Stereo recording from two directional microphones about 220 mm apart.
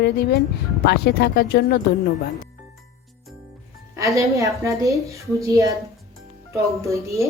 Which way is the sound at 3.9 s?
15° right (ahead or behind).